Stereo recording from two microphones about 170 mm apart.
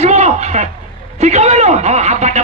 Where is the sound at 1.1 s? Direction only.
40° right (ahead or behind).